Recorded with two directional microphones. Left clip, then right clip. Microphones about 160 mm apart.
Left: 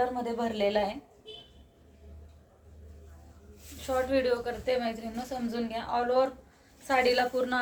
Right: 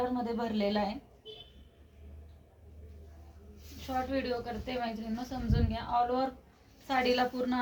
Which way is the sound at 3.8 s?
25° left (ahead or behind).